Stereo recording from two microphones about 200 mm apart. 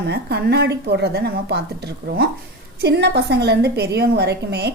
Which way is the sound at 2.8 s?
55° right (ahead or behind).